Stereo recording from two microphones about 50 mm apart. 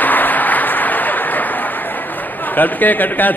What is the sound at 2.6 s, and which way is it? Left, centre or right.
Speech, left.